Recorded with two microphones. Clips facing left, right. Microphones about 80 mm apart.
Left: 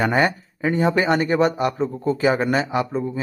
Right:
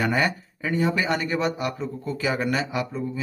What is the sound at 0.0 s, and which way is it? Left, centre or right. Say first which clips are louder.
Speech: left 4 dB; left.